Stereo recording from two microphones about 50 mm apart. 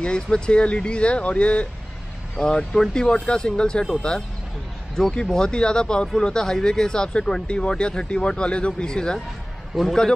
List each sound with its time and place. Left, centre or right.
0.0 s speech: centre
9.7 s a man's voice: centre